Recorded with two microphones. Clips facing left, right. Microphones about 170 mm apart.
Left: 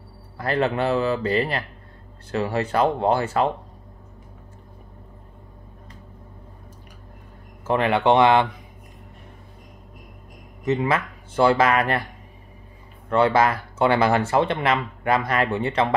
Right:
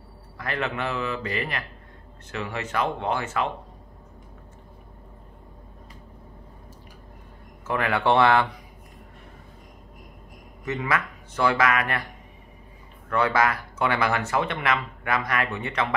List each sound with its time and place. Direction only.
0.4 s a man's voice: 35° left (ahead or behind)
7.6 s speech: 25° left (ahead or behind)
10.6 s speech: 25° left (ahead or behind)
13.1 s speech: 25° left (ahead or behind)